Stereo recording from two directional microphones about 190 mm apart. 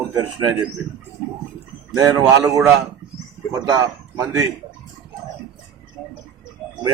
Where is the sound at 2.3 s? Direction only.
15° right (ahead or behind).